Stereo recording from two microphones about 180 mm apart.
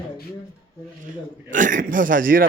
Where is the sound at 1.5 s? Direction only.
45° right (ahead or behind).